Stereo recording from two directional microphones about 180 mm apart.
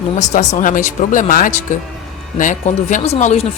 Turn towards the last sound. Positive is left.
turn(degrees=40)  # may be behind; listen again after turning